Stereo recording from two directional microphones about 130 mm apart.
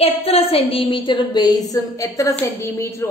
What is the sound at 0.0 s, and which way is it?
A woman's voice, 50° left (ahead or behind).